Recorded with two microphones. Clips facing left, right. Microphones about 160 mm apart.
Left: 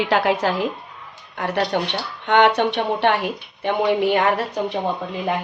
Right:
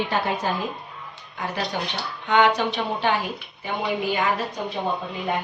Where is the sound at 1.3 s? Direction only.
65° left (ahead or behind).